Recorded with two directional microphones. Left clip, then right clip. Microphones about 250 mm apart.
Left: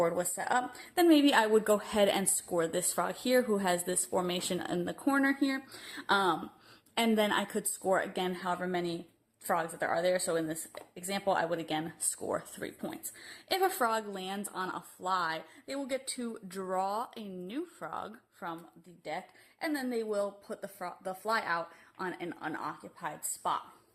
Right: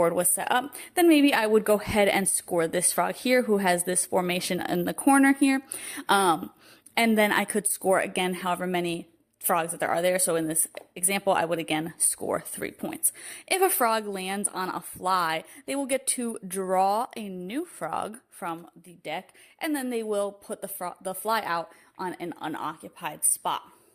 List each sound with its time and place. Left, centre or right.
0.0 s speech: right